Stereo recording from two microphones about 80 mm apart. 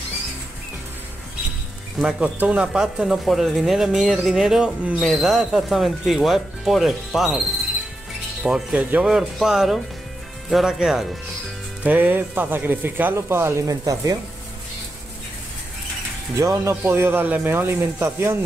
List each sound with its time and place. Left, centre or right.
2.0 s speech: centre
11.8 s speech: right
16.3 s speech: right